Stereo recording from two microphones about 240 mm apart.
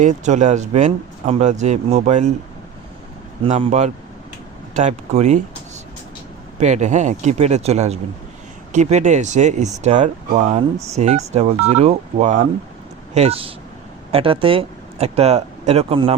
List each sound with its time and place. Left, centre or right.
0.0 s speech: right
3.4 s speech: right
6.6 s speech: right